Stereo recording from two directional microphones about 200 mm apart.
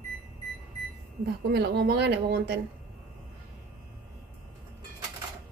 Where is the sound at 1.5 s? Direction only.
55° right (ahead or behind).